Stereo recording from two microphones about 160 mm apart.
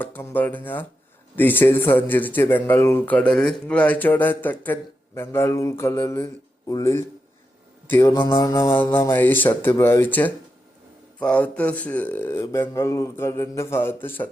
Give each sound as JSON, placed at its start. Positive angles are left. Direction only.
{"t": 0.0, "sound": "a man's voice", "side_deg": 10}